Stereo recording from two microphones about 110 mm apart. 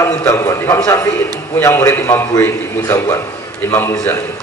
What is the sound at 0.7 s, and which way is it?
A man's voice, 30° left (ahead or behind).